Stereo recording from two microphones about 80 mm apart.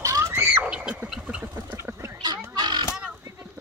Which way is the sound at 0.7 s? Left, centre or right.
Centre.